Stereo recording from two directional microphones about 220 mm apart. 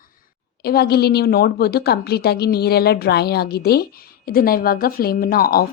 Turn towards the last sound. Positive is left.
turn(degrees=40)  # may be behind; listen again after turning